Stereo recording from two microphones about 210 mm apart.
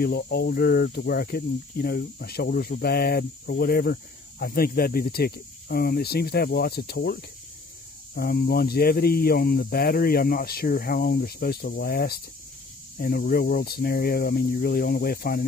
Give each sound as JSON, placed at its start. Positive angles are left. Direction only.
{"t": 0.0, "sound": "speech", "side_deg": 50}